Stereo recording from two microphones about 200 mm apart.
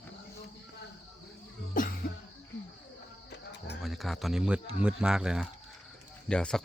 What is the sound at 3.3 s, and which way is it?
Music, 55° left (ahead or behind).